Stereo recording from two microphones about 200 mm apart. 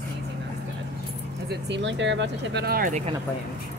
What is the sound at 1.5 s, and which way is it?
Speech, 60° right (ahead or behind).